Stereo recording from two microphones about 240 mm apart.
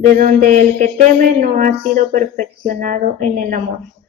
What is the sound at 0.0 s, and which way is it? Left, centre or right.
A woman's voice, right.